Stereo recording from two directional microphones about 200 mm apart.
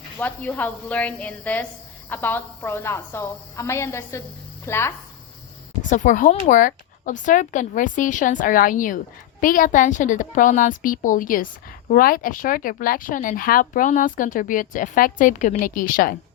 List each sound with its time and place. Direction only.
0.2 s a woman's voice: 10° left (ahead or behind)
5.9 s speech: 40° left (ahead or behind)